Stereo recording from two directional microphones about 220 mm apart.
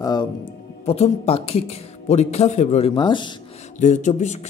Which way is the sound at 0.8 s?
25° left (ahead or behind).